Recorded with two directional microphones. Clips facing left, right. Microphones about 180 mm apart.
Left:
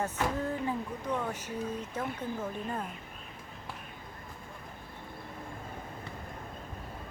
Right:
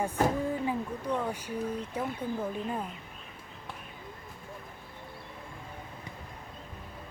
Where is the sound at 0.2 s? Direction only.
40° right (ahead or behind).